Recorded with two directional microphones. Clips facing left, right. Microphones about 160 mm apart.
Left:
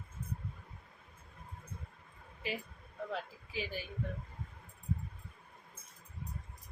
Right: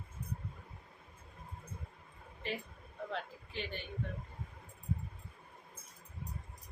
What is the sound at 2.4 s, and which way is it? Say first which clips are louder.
A woman's voice: left 1 dB; 5° left (ahead or behind).